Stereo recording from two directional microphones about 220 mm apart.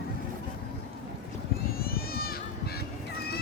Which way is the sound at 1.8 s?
45° left (ahead or behind).